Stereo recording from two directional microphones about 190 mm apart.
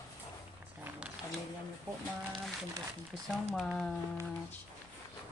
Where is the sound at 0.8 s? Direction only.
5° right (ahead or behind).